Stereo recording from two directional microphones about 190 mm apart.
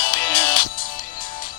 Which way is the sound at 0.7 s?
45° left (ahead or behind).